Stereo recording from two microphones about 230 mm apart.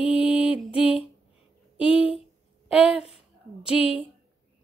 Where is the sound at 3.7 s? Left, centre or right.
Left.